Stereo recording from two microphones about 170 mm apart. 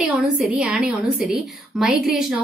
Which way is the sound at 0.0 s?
5° right (ahead or behind).